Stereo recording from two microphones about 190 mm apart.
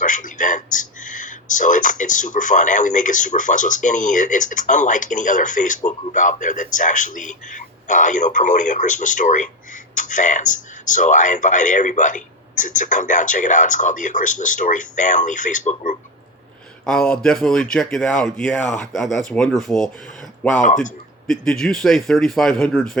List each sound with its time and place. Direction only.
0.0 s speech: 45° left (ahead or behind)
16.8 s speech: 5° left (ahead or behind)
20.6 s speech: 40° left (ahead or behind)
21.2 s speech: 5° left (ahead or behind)